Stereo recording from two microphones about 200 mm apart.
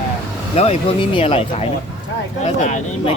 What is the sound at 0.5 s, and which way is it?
Speech, 30° left (ahead or behind).